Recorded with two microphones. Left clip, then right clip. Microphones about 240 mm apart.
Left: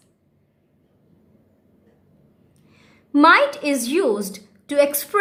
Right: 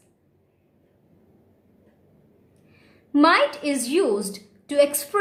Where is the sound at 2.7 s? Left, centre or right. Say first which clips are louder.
Left 2 dB; centre.